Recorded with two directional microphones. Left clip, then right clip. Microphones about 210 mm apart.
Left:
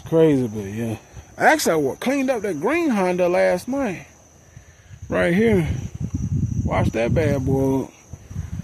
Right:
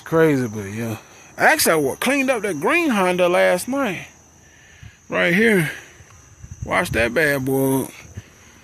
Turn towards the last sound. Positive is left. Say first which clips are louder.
# right 1 dB
turn(degrees=0)  # may be behind; listen again after turning